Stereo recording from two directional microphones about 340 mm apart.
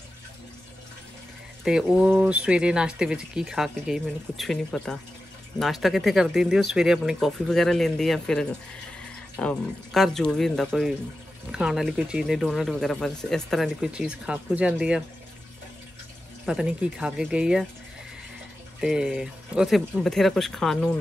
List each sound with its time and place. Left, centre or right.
1.6 s speech: centre
16.4 s speech: centre
18.8 s speech: centre